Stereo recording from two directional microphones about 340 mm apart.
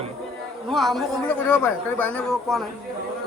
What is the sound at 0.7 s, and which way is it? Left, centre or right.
Speech, centre.